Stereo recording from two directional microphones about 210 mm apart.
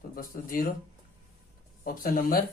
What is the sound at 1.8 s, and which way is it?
Speech, 40° left (ahead or behind).